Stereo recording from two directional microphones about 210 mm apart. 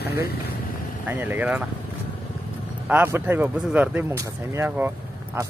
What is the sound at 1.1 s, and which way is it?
Speech, 10° right (ahead or behind).